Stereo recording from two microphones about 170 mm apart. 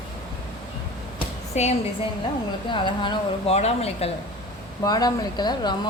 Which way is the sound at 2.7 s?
30° left (ahead or behind).